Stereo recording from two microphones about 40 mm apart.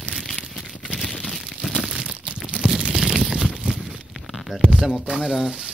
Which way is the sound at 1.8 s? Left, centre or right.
Right.